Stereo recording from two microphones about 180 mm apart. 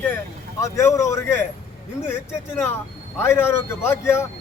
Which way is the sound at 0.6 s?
15° left (ahead or behind).